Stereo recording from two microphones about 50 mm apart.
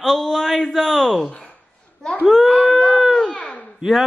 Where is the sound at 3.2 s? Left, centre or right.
Centre.